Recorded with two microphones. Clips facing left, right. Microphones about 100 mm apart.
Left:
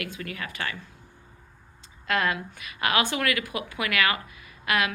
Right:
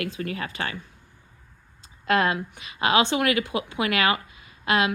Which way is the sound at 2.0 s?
30° right (ahead or behind).